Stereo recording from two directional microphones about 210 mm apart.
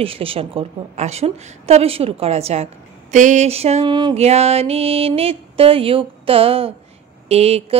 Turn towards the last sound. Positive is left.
turn(degrees=-30)  # may be behind; listen again after turning